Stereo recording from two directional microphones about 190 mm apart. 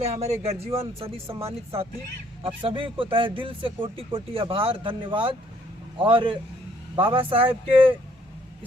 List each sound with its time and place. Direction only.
0.0 s speech: 35° right (ahead or behind)